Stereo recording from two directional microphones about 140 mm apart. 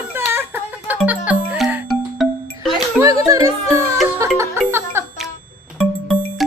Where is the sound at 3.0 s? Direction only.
25° right (ahead or behind).